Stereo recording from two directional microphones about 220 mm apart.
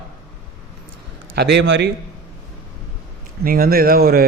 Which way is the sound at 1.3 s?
55° right (ahead or behind).